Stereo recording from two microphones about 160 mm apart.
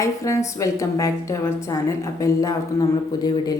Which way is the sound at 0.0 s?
20° left (ahead or behind).